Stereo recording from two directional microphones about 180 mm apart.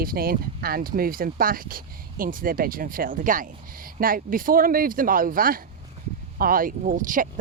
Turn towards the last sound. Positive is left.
turn(degrees=-45)  # may be behind; listen again after turning